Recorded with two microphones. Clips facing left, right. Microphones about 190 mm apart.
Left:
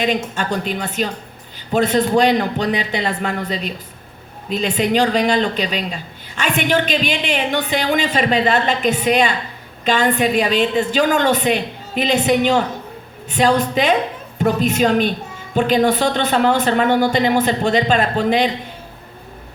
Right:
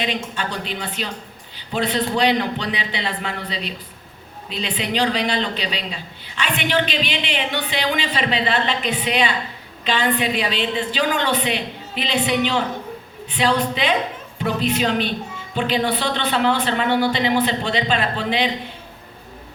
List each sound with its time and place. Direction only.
0.0 s speech: 45° left (ahead or behind)